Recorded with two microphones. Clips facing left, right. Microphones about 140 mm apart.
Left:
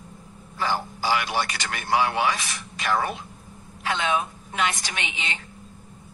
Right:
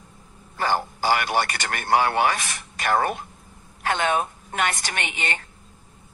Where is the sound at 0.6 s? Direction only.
50° right (ahead or behind).